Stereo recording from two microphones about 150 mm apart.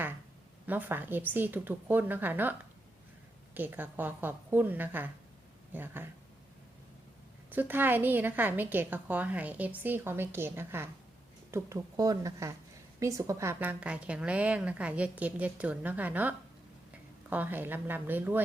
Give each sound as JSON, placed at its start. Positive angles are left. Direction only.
{"t": 0.7, "sound": "a woman's voice", "side_deg": -10}
{"t": 7.5, "sound": "a woman's voice", "side_deg": -15}